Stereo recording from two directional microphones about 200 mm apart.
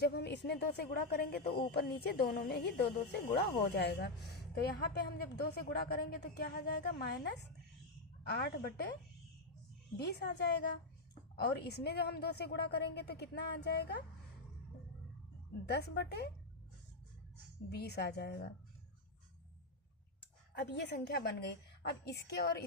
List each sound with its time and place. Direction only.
0.0 s speech: 55° left (ahead or behind)
10.0 s a woman's voice: 55° left (ahead or behind)
15.6 s a woman's voice: 55° left (ahead or behind)
17.7 s a woman's voice: 55° left (ahead or behind)
20.6 s a woman's voice: 60° left (ahead or behind)